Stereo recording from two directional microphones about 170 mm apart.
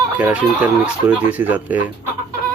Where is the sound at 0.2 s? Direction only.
10° right (ahead or behind).